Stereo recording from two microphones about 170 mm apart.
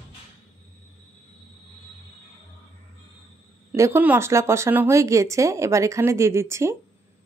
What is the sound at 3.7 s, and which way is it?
Speech, 15° right (ahead or behind).